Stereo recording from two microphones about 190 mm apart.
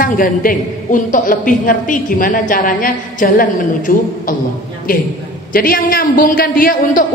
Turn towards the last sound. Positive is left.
turn(degrees=50)  # may be behind; listen again after turning